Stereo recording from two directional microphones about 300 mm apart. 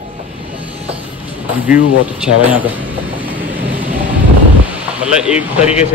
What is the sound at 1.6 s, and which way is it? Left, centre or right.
Speech, centre.